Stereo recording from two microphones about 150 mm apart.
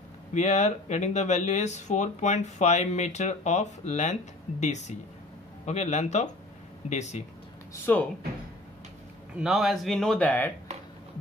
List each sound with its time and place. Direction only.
0.3 s speech: 50° left (ahead or behind)
7.8 s speech: 10° left (ahead or behind)
9.4 s speech: centre (ahead or behind)